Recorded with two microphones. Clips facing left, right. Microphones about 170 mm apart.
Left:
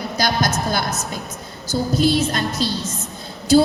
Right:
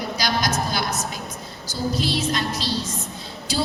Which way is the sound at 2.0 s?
50° left (ahead or behind).